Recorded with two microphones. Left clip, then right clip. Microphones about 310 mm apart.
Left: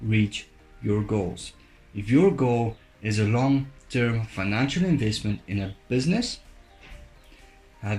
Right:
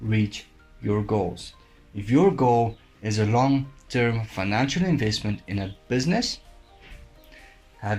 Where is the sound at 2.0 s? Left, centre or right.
Right.